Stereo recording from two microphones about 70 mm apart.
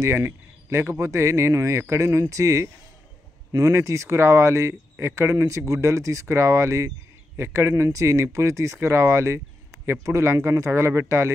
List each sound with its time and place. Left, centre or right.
0.0 s speech: right